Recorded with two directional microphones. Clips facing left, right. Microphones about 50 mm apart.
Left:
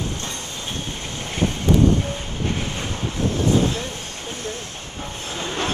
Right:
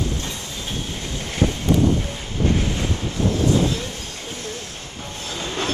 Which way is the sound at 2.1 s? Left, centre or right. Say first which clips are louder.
Right 4 dB; left.